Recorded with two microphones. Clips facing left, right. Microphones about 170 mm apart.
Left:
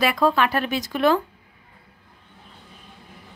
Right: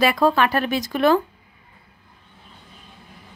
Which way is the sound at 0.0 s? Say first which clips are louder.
Right 2 dB; 35° right (ahead or behind).